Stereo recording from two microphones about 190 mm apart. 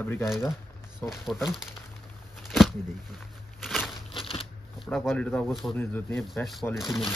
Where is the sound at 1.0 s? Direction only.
10° left (ahead or behind).